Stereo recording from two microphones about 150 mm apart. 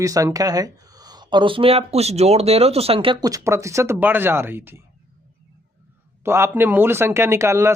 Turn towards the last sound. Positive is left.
turn(degrees=-20)  # may be behind; listen again after turning